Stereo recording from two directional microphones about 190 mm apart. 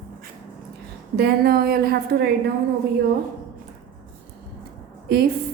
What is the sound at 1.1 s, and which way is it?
A woman's voice, 55° right (ahead or behind).